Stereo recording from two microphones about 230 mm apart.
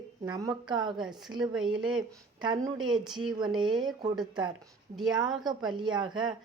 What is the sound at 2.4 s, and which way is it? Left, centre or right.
Speech, centre.